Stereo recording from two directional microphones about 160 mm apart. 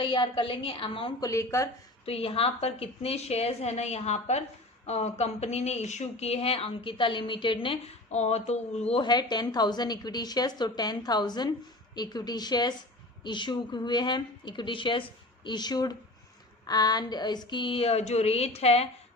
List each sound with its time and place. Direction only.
0.0 s speech: 30° left (ahead or behind)
1.2 s a woman's voice: 20° left (ahead or behind)
2.0 s speech: 40° left (ahead or behind)
8.9 s a woman's voice: 30° left (ahead or behind)